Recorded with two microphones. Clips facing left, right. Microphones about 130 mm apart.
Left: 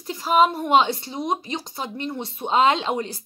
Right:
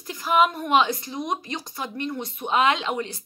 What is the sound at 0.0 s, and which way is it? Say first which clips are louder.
A woman's voice: left 2 dB; 25° left (ahead or behind).